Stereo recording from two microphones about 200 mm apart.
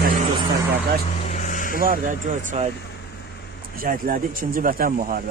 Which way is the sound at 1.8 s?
45° right (ahead or behind).